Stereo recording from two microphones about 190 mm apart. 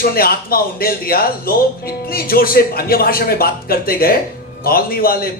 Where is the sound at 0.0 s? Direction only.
50° left (ahead or behind).